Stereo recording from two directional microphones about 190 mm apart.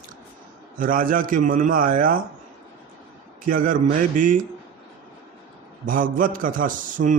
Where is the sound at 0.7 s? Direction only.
45° right (ahead or behind).